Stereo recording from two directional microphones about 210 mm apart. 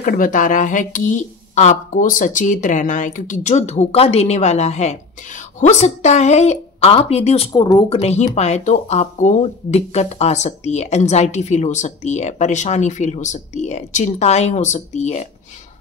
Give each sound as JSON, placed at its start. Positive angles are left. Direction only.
{"t": 0.0, "sound": "speech", "side_deg": 40}
{"t": 8.0, "sound": "speech", "side_deg": 30}